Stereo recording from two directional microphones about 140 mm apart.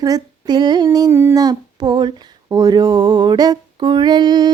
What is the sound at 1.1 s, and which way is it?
Humming, 15° right (ahead or behind).